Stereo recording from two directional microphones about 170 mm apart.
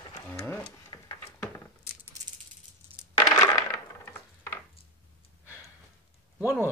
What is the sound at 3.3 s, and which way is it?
Coin, 20° left (ahead or behind).